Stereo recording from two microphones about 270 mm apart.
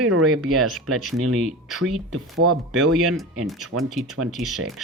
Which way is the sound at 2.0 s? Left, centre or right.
Right.